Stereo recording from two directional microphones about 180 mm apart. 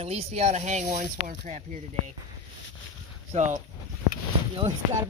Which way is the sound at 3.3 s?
40° right (ahead or behind).